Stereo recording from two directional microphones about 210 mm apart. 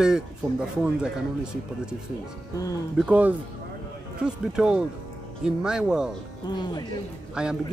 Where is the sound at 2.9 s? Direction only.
5° right (ahead or behind).